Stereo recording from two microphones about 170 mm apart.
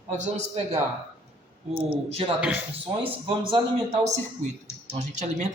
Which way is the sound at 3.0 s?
30° right (ahead or behind).